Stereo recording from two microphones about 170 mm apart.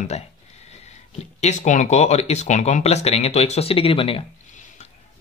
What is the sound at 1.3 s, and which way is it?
Speech, 45° left (ahead or behind).